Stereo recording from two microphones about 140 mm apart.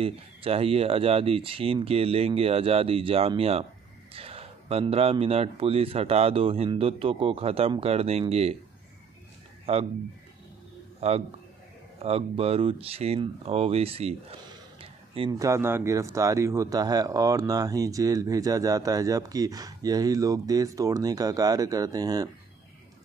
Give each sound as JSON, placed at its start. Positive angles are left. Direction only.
{"t": 0.0, "sound": "speech", "side_deg": -45}
{"t": 9.7, "sound": "speech", "side_deg": -45}
{"t": 11.0, "sound": "a man's voice", "side_deg": -45}
{"t": 14.8, "sound": "a sound", "side_deg": -40}
{"t": 15.3, "sound": "a man's voice", "side_deg": -20}